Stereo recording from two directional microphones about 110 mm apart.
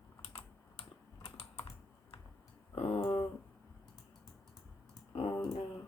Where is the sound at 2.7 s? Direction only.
60° left (ahead or behind).